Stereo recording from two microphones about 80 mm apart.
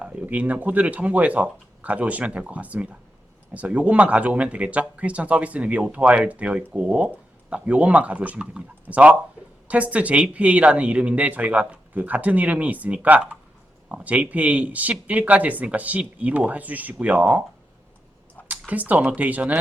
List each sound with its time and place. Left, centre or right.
0.0 s speech: centre
18.4 s speech: centre